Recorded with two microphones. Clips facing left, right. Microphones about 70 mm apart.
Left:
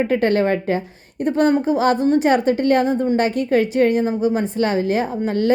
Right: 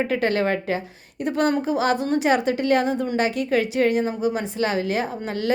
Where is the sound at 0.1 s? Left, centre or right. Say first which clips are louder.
Left 4 dB; left.